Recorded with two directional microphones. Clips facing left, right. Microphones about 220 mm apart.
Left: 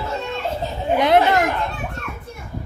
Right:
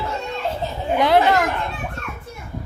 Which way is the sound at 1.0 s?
20° left (ahead or behind).